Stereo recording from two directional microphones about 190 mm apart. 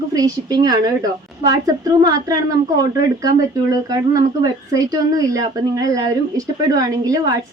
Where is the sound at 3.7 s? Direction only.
20° right (ahead or behind).